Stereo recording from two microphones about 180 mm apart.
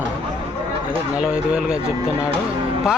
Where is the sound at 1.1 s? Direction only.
5° right (ahead or behind).